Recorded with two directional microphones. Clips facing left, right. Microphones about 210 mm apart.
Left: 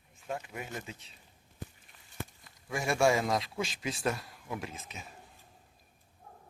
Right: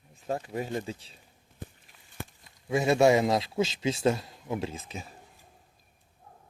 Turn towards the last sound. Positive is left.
turn(degrees=-30)  # may be behind; listen again after turning